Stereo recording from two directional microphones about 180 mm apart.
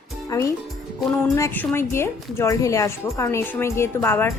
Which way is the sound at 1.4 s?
10° left (ahead or behind).